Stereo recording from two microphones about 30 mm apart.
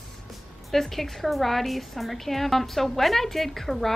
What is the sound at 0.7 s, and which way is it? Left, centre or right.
A woman's voice, centre.